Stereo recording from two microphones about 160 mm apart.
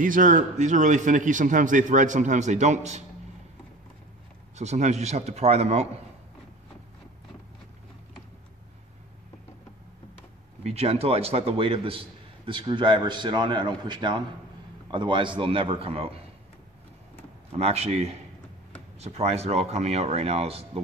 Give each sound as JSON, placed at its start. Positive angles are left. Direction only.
{"t": 0.0, "sound": "a man's voice", "side_deg": -55}
{"t": 4.6, "sound": "a man's voice", "side_deg": -45}
{"t": 10.6, "sound": "a man's voice", "side_deg": -40}
{"t": 17.5, "sound": "a man's voice", "side_deg": -40}